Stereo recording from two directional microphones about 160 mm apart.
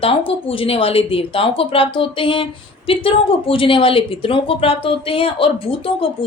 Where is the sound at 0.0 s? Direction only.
35° left (ahead or behind).